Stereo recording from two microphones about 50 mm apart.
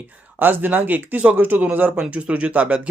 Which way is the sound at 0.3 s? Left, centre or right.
Right.